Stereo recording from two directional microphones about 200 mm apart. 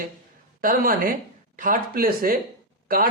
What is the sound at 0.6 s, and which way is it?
Speech, 45° right (ahead or behind).